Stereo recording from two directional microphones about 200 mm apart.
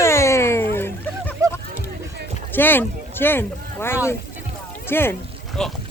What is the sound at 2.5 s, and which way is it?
Boat, 10° left (ahead or behind).